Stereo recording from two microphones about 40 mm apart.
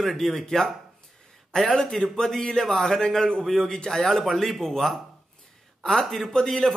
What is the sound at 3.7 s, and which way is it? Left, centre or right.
Speech, centre.